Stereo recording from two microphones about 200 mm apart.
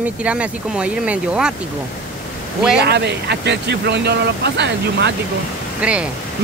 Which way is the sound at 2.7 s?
55° right (ahead or behind).